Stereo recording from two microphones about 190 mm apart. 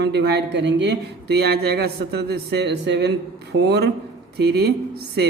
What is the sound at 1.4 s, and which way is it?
A man's voice, 55° right (ahead or behind).